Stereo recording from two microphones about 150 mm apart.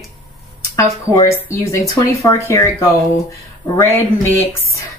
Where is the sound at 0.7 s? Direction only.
20° left (ahead or behind).